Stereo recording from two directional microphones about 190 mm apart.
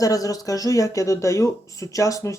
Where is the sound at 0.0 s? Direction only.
20° left (ahead or behind).